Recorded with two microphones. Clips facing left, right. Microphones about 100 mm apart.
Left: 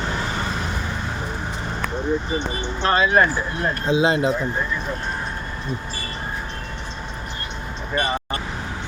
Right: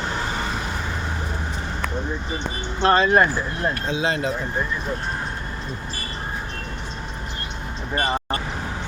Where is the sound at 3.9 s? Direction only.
20° left (ahead or behind).